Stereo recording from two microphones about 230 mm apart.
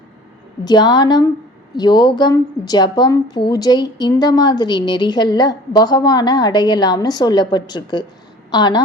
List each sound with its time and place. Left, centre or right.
0.6 s a woman's voice: centre